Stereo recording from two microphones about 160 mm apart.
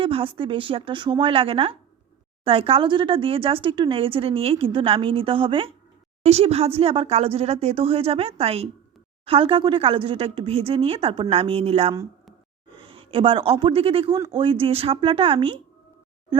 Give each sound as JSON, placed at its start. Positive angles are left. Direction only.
{"t": 0.0, "sound": "a man's voice", "side_deg": -35}